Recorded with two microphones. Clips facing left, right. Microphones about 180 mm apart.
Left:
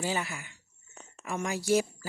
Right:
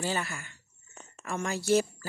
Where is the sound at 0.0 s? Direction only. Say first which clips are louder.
Even; 15° left (ahead or behind).